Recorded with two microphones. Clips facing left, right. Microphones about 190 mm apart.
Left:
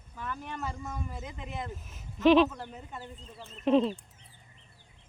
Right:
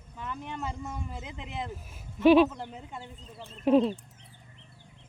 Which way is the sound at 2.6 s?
20° right (ahead or behind).